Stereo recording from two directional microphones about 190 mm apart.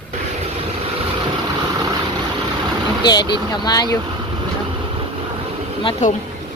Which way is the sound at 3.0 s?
20° left (ahead or behind).